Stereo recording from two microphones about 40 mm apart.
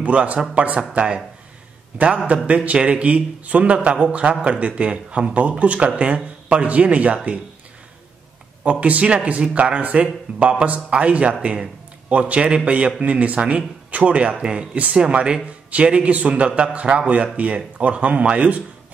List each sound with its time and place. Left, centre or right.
0.0 s a man's voice: right
2.2 s a man's voice: right
8.8 s a man's voice: right
17.1 s a man's voice: right